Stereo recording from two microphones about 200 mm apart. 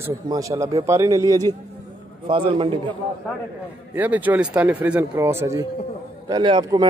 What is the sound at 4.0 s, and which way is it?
A man's voice, 10° right (ahead or behind).